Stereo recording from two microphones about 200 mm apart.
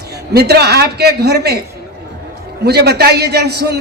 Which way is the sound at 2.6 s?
55° right (ahead or behind).